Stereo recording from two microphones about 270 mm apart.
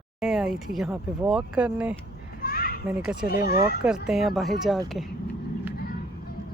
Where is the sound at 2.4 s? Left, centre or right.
Left.